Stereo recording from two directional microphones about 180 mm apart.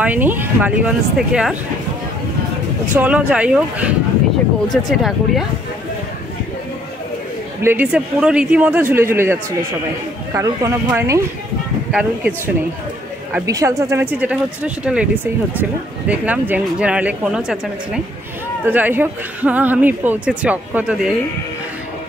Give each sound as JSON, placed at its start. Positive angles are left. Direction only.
{"t": 0.0, "sound": "speech", "side_deg": -10}
{"t": 3.0, "sound": "speech", "side_deg": -5}
{"t": 7.6, "sound": "speech", "side_deg": -10}
{"t": 16.1, "sound": "speech", "side_deg": -10}